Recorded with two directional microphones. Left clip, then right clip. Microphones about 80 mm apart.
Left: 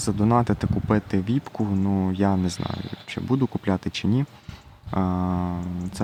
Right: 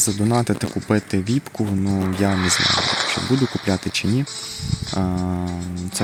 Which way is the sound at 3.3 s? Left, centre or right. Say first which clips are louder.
Right 4 dB; right.